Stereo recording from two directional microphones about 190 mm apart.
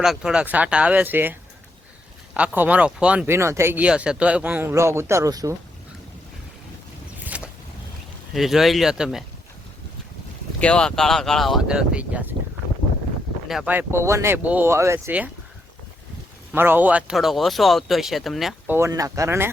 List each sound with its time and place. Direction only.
0.0 s speech: centre (ahead or behind); by 5.5 s 20° right (ahead or behind)
7.3 s boat: 5° right (ahead or behind)
8.3 s speech: centre (ahead or behind)
10.6 s speech: 5° left (ahead or behind)
13.5 s speech: 5° right (ahead or behind)
16.5 s speech: 10° right (ahead or behind)
18.8 s speech: 15° right (ahead or behind)